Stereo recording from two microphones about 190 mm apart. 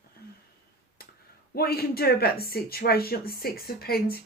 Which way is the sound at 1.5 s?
55° left (ahead or behind).